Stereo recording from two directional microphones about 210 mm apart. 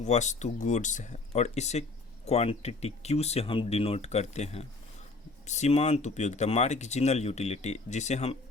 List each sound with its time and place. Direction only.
0.0 s speech: 35° left (ahead or behind)